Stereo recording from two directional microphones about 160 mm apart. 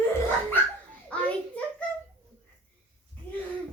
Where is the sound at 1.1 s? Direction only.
10° left (ahead or behind).